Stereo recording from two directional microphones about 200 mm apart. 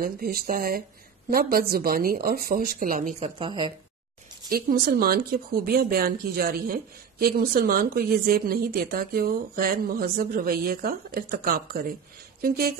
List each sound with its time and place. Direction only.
0.0 s speech: 50° right (ahead or behind)
3.3 s speech: 25° right (ahead or behind)
4.5 s speech: 50° right (ahead or behind)